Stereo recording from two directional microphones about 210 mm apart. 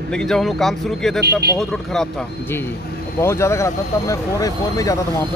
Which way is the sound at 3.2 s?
15° left (ahead or behind).